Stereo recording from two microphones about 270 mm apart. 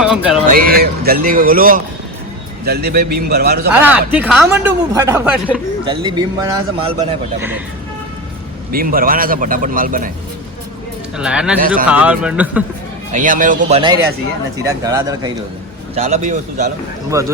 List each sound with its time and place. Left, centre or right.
0.0 s speech: centre
0.4 s a man's voice: right
3.7 s a man's voice: centre
8.7 s a man's voice: right
11.2 s a man's voice: centre
11.6 s a man's voice: right
11.9 s a man's voice: centre
13.1 s speech: right
14.6 s a man's voice: centre
16.0 s speech: right
17.1 s a man's voice: centre